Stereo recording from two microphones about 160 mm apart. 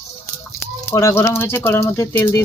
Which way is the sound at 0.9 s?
15° left (ahead or behind).